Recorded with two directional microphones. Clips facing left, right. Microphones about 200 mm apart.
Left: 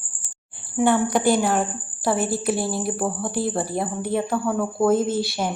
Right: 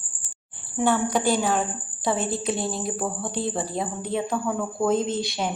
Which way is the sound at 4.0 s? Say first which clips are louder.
Left 3 dB; 15° right (ahead or behind).